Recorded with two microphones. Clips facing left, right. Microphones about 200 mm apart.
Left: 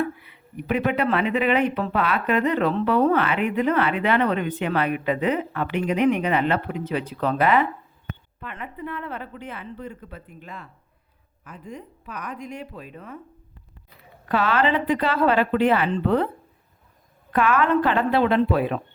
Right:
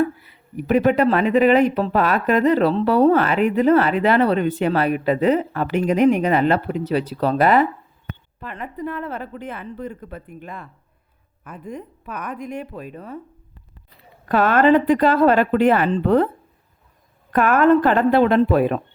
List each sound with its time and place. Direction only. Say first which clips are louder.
0.0 s speech: right 6 dB; 40° right (ahead or behind)
14.3 s speech: right 6 dB; 50° right (ahead or behind)
17.3 s speech: right 5 dB; 45° right (ahead or behind)